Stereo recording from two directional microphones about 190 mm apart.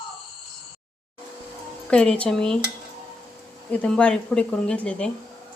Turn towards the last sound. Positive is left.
turn(degrees=5)  # may be behind; listen again after turning